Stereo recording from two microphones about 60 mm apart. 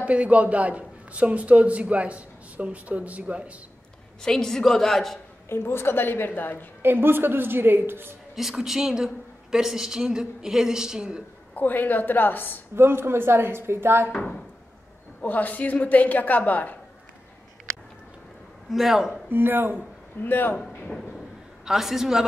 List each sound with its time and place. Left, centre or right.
0.0 s a man's voice: right
4.2 s a woman's voice: centre
5.5 s a woman's voice: left
6.8 s a woman's voice: right
8.4 s a woman's voice: centre
11.5 s a woman's voice: left
12.7 s a woman's voice: right
14.1 s a woman's voice: centre
15.2 s a woman's voice: left
18.7 s a man's voice: centre
19.2 s a woman's voice: right
20.2 s a woman's voice: left
20.5 s speech: centre
21.6 s a man's voice: centre